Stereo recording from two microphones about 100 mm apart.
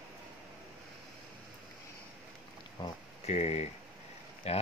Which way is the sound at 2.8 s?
45° left (ahead or behind).